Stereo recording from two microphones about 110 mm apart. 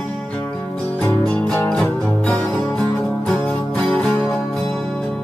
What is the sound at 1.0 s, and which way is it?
Music, 15° left (ahead or behind).